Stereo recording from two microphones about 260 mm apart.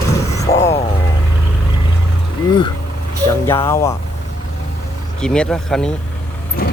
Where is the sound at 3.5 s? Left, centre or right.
Centre.